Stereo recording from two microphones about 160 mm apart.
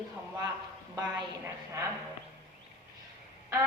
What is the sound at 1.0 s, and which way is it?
Speech, 20° right (ahead or behind).